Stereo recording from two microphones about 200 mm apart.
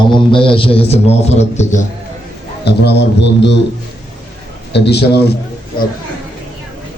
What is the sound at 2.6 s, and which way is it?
Speech, 55° left (ahead or behind).